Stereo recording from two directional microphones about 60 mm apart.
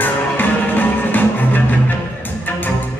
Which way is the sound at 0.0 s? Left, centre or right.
Left.